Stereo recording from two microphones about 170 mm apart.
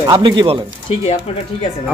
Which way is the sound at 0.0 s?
25° right (ahead or behind).